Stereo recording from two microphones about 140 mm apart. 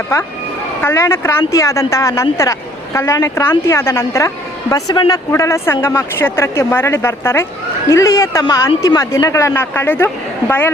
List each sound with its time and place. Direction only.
0.8 s speech: 20° left (ahead or behind)